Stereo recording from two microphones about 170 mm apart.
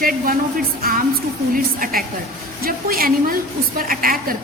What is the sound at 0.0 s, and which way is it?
A woman's voice, 55° right (ahead or behind).